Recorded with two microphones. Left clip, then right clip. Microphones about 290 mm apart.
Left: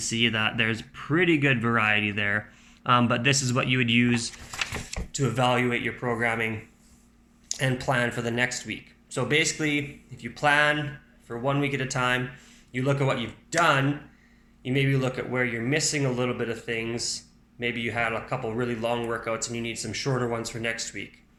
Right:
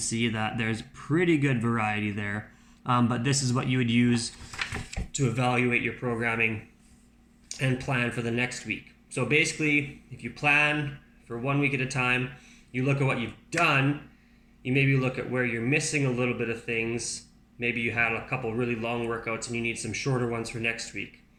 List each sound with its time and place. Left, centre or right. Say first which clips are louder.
0.0 s speech: left 5 dB; centre